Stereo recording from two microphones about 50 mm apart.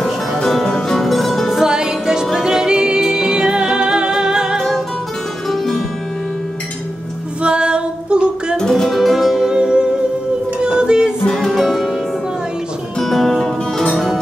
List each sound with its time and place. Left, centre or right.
0.0 s music: centre
1.6 s music: centre
4.6 s music: centre
7.4 s female singing: right
8.5 s music: centre
9.5 s music: centre
11.3 s music: centre
13.0 s music: centre